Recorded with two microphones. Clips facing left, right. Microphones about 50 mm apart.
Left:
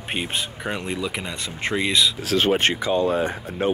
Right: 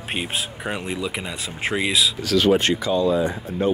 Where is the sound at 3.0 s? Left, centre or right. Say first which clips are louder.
Right 2 dB; left.